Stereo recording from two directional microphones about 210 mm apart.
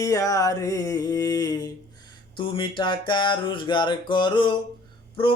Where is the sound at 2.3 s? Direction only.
25° left (ahead or behind).